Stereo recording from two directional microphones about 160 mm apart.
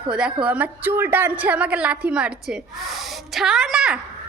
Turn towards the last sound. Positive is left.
turn(degrees=-5)  # may be behind; listen again after turning